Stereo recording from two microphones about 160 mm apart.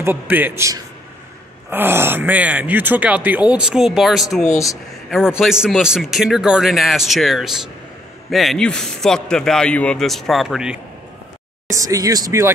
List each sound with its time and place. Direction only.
0.0 s a man's voice: 10° right (ahead or behind)
11.6 s speech: 20° right (ahead or behind)